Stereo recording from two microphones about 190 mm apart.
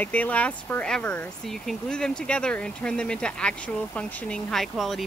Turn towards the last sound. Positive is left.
turn(degrees=0)  # may be behind; listen again after turning